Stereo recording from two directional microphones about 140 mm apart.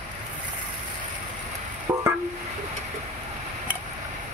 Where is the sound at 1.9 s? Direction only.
25° right (ahead or behind).